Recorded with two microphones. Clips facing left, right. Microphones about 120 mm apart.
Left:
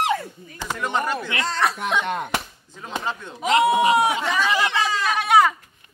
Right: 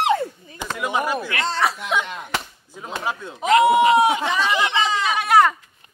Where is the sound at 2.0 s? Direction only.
60° left (ahead or behind).